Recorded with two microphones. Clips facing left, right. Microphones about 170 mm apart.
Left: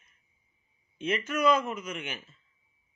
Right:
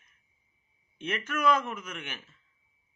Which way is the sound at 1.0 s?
15° left (ahead or behind).